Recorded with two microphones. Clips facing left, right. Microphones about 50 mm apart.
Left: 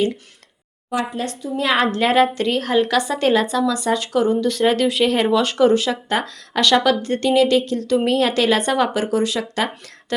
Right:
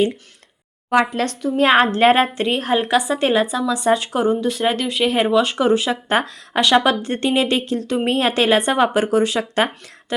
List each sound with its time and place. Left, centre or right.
0.9 s speech: right
1.6 s a woman's voice: right; by 3.8 s centre
3.8 s speech: right
6.1 s a woman's voice: right
10.1 s speech: centre